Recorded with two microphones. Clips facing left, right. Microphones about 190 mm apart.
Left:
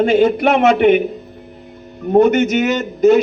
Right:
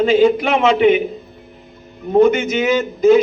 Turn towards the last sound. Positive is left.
turn(degrees=55)  # may be behind; listen again after turning